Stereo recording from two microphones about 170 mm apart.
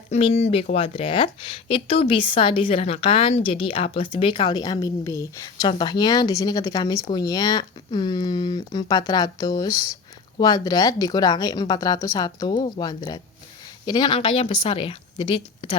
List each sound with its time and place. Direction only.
0.1 s speech: 35° left (ahead or behind)